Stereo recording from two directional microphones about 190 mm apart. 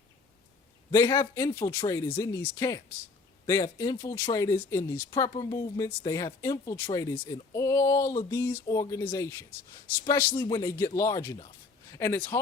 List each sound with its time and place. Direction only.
0.9 s speech: 20° left (ahead or behind)